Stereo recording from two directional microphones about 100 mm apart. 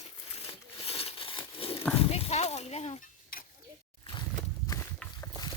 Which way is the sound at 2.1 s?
90° left.